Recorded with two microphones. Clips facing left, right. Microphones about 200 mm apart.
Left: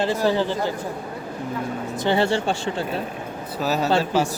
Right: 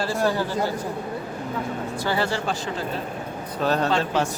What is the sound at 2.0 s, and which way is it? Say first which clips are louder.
Speech: left 5 dB; 25° left (ahead or behind).